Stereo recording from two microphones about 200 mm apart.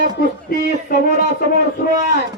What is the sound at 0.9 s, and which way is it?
Speech, 45° left (ahead or behind).